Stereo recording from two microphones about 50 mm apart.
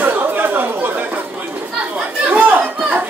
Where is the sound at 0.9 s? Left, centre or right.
Right.